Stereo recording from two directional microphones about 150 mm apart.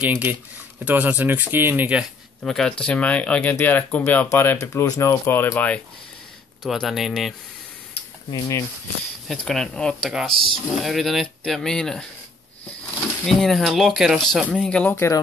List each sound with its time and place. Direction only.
0.0 s speech: 10° right (ahead or behind); by 5.8 s 10° left (ahead or behind)
6.6 s speech: centre (ahead or behind)
8.3 s speech: 20° left (ahead or behind)
9.3 s speech: centre (ahead or behind)
13.2 s speech: centre (ahead or behind)